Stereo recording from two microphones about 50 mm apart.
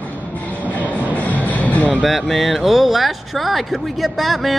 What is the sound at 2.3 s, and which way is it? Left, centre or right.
Speech, centre.